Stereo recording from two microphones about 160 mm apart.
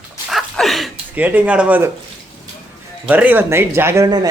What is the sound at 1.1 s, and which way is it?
Speech, 10° right (ahead or behind).